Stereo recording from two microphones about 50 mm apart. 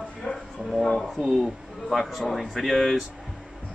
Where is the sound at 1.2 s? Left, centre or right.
Centre.